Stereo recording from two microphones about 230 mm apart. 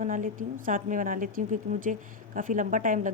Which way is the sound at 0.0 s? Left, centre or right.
Right.